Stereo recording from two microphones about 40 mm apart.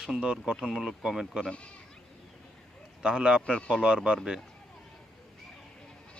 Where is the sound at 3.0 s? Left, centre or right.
Right.